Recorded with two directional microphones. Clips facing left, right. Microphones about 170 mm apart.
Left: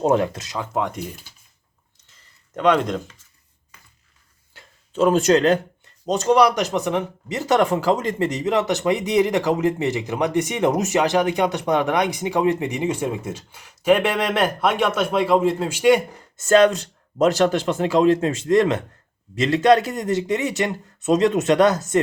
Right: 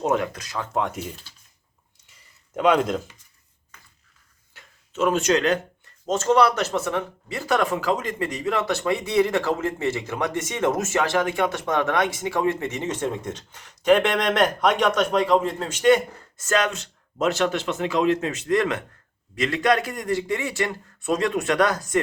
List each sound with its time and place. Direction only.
0.0 s speech: 30° left (ahead or behind)
0.6 s speech: 5° left (ahead or behind)
2.6 s speech: 5° right (ahead or behind)
4.5 s a sound: 35° left (ahead or behind)
6.1 s speech: 15° left (ahead or behind)
16.4 s speech: 30° left (ahead or behind)